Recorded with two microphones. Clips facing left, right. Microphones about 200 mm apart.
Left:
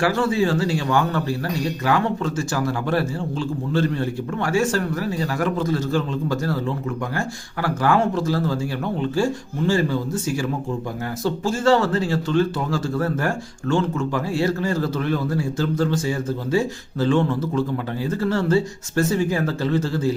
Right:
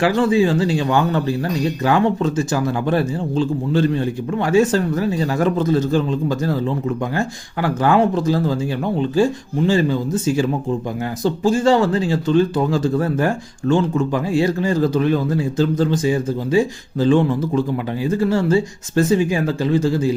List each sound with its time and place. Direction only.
0.0 s a man's voice: 15° right (ahead or behind)